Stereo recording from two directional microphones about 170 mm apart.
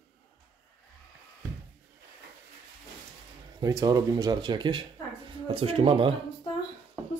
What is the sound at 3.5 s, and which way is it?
Speech, 20° right (ahead or behind).